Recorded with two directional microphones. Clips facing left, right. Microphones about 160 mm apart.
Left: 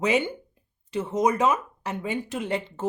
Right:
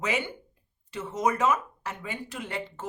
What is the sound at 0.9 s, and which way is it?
A woman's voice, 20° left (ahead or behind).